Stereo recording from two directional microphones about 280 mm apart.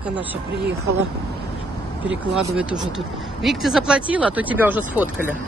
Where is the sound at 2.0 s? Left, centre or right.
Centre.